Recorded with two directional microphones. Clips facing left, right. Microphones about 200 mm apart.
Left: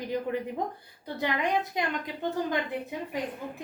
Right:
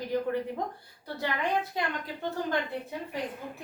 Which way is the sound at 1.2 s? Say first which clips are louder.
Left 2 dB; 15° left (ahead or behind).